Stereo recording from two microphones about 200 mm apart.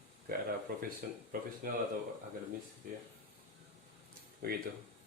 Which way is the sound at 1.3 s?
45° right (ahead or behind).